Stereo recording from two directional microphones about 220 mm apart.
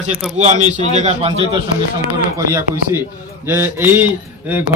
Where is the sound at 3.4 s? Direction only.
10° right (ahead or behind).